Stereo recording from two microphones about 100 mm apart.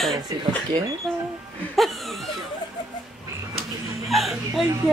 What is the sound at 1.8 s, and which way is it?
Laughter, centre (ahead or behind).